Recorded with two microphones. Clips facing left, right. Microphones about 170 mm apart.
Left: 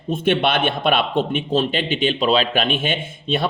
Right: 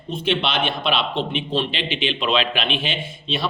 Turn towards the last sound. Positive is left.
turn(degrees=50)  # may be behind; listen again after turning